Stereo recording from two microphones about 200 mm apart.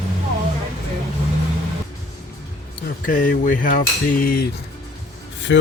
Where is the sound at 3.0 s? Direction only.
45° left (ahead or behind).